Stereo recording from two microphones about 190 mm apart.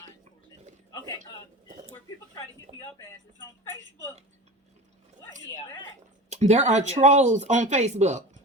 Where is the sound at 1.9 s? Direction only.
20° left (ahead or behind).